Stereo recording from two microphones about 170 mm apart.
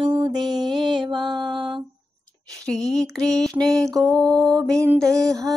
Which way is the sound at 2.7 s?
5° left (ahead or behind).